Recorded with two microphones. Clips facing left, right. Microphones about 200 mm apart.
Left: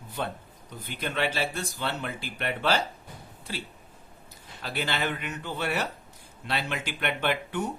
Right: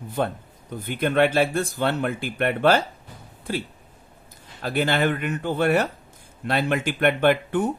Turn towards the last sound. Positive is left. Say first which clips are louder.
# right 9 dB
turn(degrees=-50)  # may be behind; listen again after turning